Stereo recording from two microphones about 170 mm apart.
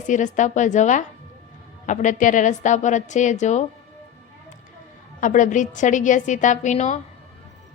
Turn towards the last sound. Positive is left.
turn(degrees=45)  # may be behind; listen again after turning